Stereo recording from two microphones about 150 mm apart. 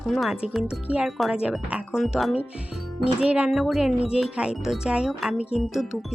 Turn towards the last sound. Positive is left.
turn(degrees=0)  # may be behind; listen again after turning